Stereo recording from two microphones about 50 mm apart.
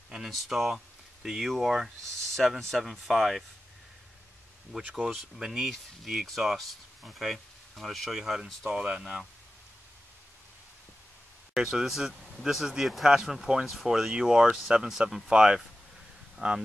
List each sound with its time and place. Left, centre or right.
0.3 s speech: centre
4.8 s speech: centre
8.2 s speech: centre
11.5 s speech: centre